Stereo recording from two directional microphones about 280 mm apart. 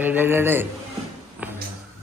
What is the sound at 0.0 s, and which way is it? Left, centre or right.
Speech, centre.